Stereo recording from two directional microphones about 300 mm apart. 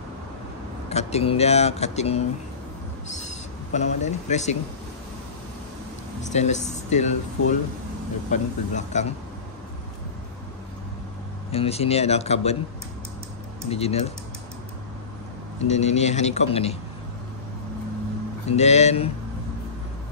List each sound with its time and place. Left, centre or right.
0.8 s speech: left
3.7 s speech: left
6.2 s speech: left
11.5 s speech: centre
13.7 s speech: centre
15.6 s speech: left
18.6 s speech: left